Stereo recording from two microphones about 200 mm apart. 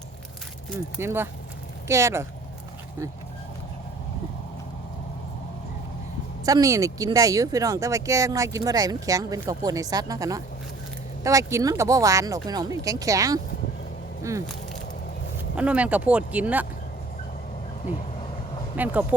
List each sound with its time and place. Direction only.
0.9 s speech: 10° right (ahead or behind)
6.4 s speech: 15° right (ahead or behind)
15.5 s speech: 5° right (ahead or behind)
18.8 s speech: 10° right (ahead or behind)